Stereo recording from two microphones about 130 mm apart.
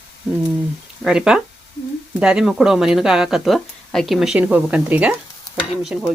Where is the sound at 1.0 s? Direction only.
5° right (ahead or behind).